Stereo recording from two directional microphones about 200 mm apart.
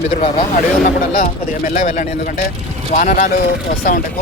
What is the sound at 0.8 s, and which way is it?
A man's voice, 40° left (ahead or behind).